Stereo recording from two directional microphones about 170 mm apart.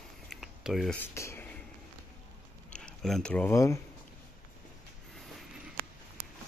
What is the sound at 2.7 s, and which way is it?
Speech, 5° left (ahead or behind).